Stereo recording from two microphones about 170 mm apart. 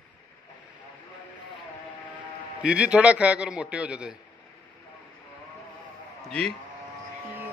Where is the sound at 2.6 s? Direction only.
5° right (ahead or behind).